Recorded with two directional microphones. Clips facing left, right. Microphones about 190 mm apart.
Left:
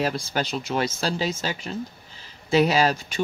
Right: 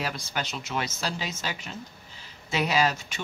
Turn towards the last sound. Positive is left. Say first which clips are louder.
# left 4 dB
turn(degrees=35)  # may be behind; listen again after turning